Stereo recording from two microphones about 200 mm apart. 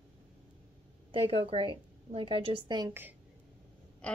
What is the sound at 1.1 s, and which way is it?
A woman's voice, 30° right (ahead or behind).